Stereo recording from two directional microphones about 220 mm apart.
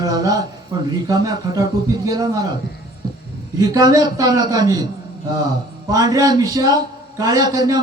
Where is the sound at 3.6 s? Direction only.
15° right (ahead or behind).